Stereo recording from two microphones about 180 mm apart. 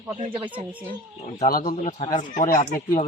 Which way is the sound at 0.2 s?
30° right (ahead or behind).